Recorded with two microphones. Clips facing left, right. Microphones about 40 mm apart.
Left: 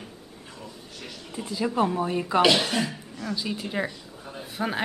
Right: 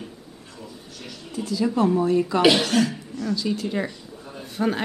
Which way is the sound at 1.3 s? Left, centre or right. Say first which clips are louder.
Right 4 dB; left.